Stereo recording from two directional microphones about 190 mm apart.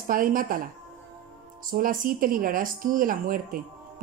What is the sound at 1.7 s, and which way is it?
Speech, 45° right (ahead or behind).